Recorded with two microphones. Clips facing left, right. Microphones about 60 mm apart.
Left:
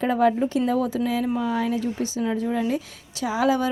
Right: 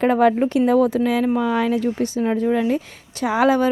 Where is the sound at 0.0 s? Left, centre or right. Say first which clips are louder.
Right 4 dB; right.